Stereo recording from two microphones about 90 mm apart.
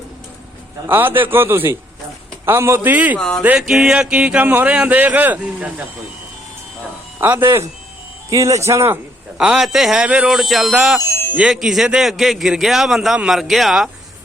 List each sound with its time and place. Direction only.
0.9 s a man's voice: 25° right (ahead or behind)
3.2 s music: 5° left (ahead or behind)
3.7 s speech: 5° right (ahead or behind)
7.2 s a man's voice: 25° right (ahead or behind)
8.3 s speech: 35° right (ahead or behind)
9.4 s a man's voice: 5° right (ahead or behind)
11.1 s speech: 20° left (ahead or behind)
11.3 s a man's voice: 5° right (ahead or behind)